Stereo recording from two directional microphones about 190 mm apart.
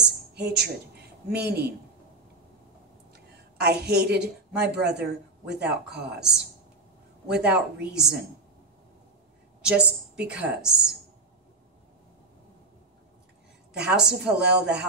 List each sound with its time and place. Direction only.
0.3 s speech: 60° right (ahead or behind)
3.1 s a sound: 60° right (ahead or behind)
4.6 s speech: 60° right (ahead or behind)
6.1 s speech: 5° right (ahead or behind)
9.6 s a woman's voice: 5° right (ahead or behind)
13.8 s speech: 5° right (ahead or behind)